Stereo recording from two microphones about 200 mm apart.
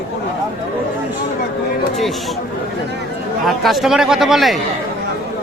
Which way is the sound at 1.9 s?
Centre (ahead or behind).